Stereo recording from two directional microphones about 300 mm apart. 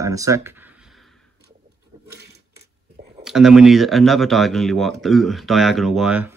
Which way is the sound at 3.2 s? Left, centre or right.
Centre.